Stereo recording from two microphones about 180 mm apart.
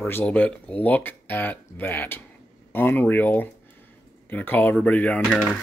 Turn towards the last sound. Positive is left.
turn(degrees=5)  # may be behind; listen again after turning